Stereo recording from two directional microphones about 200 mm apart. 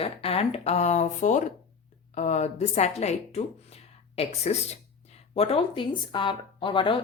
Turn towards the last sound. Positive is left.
turn(degrees=25)  # may be behind; listen again after turning